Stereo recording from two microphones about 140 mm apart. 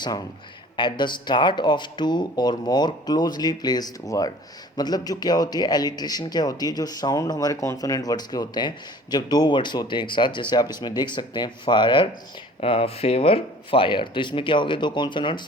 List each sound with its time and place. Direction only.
0.8 s a man's voice: 35° left (ahead or behind)